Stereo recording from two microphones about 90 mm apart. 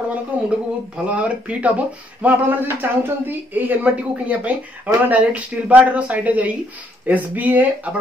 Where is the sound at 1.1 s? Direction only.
15° right (ahead or behind).